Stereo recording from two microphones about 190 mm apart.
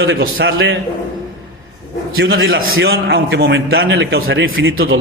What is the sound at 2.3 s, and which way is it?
A man's voice, 85° right.